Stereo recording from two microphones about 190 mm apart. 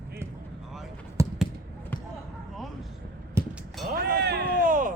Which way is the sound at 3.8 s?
55° right (ahead or behind).